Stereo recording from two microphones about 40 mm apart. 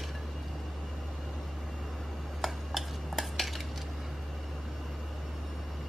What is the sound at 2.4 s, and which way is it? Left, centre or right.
Cutlery, centre.